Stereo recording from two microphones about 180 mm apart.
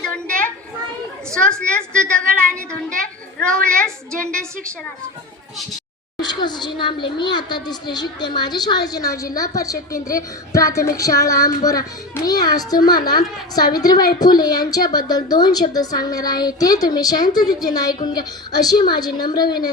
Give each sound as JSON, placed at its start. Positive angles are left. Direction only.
{"t": 0.0, "sound": "a sound", "side_deg": 5}
{"t": 1.3, "sound": "a woman's voice", "side_deg": 5}
{"t": 3.3, "sound": "a woman's voice", "side_deg": 5}
{"t": 6.1, "sound": "a woman's voice", "side_deg": 25}